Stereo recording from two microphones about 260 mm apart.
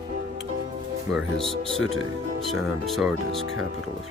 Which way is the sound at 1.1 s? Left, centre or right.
Centre.